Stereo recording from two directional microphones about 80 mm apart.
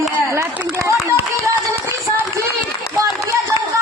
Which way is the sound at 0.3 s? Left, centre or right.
Right.